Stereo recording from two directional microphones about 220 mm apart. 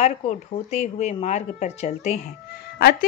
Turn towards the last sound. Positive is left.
turn(degrees=45)  # may be behind; listen again after turning